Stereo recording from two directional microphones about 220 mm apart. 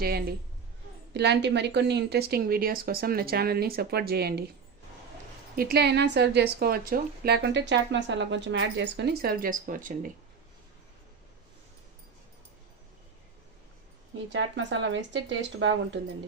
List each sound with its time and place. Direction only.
0.0 s speech: 45° right (ahead or behind)
5.5 s speech: 45° right (ahead or behind)
14.3 s speech: 55° right (ahead or behind)